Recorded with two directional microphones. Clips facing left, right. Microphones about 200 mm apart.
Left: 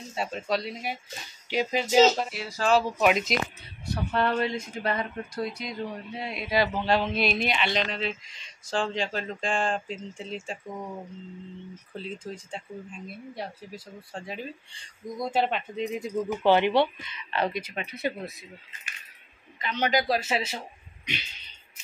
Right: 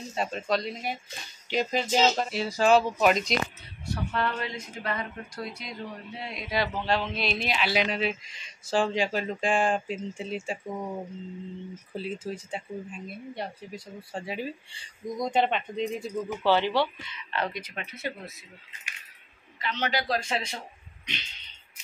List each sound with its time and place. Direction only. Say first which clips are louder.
0.1 s speech: right 1 dB; 5° left (ahead or behind)
2.3 s speech: right 4 dB; 20° right (ahead or behind)
2.7 s speech: even; centre (ahead or behind)
3.8 s a man's voice: left 3 dB; 25° left (ahead or behind)
6.1 s speech: left 4 dB; 5° left (ahead or behind)
11.9 s speech: right 3 dB; 5° right (ahead or behind)
15.1 s speech: right 1 dB; 5° left (ahead or behind)
16.0 s speech: left 3 dB; 15° left (ahead or behind)
19.6 s speech: left 4 dB; 15° left (ahead or behind)